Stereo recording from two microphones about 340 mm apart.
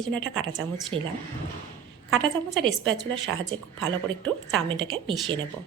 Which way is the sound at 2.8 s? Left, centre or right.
Right.